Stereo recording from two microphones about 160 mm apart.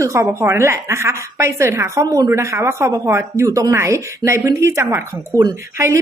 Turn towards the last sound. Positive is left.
turn(degrees=-20)  # may be behind; listen again after turning